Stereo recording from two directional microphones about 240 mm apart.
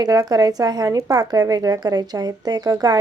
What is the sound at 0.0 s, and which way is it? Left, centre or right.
Speech, centre.